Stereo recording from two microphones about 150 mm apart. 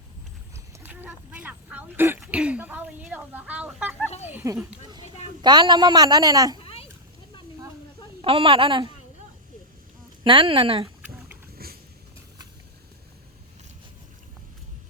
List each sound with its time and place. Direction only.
0.5 s speech: 15° right (ahead or behind)
5.4 s a woman's voice: 30° right (ahead or behind)
6.6 s a sound: 40° left (ahead or behind)
8.2 s a woman's voice: 40° right (ahead or behind)
10.2 s a woman's voice: 35° right (ahead or behind)
11.5 s a sound: 90° right